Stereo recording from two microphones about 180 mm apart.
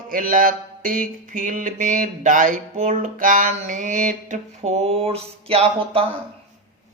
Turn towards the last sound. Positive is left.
turn(degrees=-30)  # may be behind; listen again after turning